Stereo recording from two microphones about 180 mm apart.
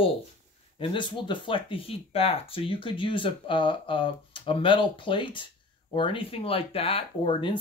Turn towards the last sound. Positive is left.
turn(degrees=30)  # may be behind; listen again after turning